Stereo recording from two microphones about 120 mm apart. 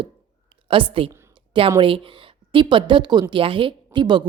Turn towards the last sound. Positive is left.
turn(degrees=-40)  # may be behind; listen again after turning